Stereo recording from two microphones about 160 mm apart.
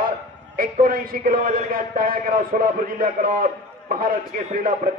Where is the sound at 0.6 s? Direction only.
65° right (ahead or behind).